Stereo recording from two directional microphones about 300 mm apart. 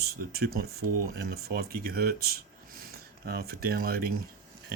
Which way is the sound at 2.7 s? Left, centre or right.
Right.